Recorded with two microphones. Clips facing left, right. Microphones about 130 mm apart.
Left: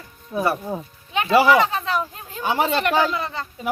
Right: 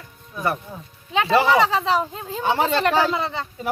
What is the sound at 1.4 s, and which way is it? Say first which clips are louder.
Speech: left 1 dB; 25° right (ahead or behind).